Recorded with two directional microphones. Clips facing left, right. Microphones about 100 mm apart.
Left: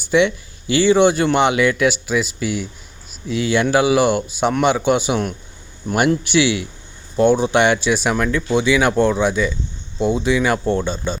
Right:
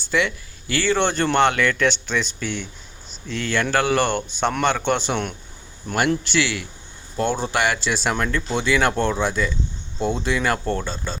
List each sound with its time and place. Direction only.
0.0 s speech: 20° left (ahead or behind)